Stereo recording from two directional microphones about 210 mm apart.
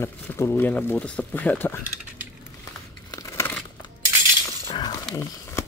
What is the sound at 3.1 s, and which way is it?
Crumpling, 10° left (ahead or behind).